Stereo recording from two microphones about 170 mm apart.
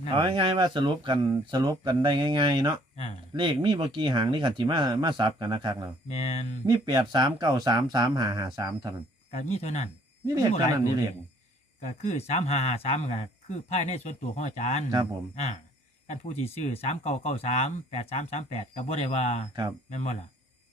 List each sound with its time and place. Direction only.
0.1 s speech: 30° right (ahead or behind)
2.9 s speech: 40° left (ahead or behind)
3.3 s speech: 30° right (ahead or behind)
6.1 s speech: 40° left (ahead or behind)
6.7 s speech: 25° right (ahead or behind)
9.3 s speech: 40° left (ahead or behind)
10.2 s speech: 25° right (ahead or behind)
11.8 s speech: 40° left (ahead or behind)
16.0 s speech: 40° left (ahead or behind)